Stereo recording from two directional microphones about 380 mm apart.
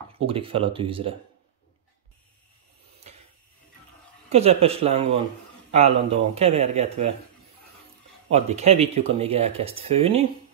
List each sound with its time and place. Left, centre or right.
0.3 s speech: centre
4.3 s speech: centre
8.3 s speech: centre